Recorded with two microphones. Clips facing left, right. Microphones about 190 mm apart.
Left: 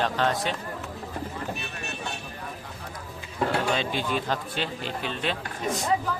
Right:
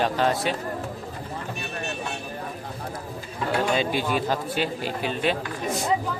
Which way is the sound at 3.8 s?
5° right (ahead or behind).